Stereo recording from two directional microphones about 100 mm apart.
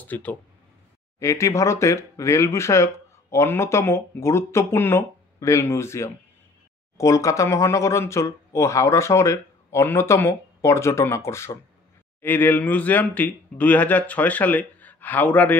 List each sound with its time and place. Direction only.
0.0 s speech: 15° left (ahead or behind)
1.2 s speech: 30° left (ahead or behind)
12.2 s speech: 20° left (ahead or behind)